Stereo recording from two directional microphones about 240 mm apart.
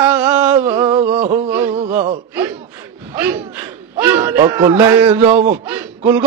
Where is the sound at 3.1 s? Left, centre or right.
Centre.